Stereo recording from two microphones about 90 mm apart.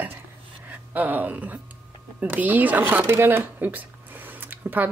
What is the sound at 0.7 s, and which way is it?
Speech, 20° right (ahead or behind).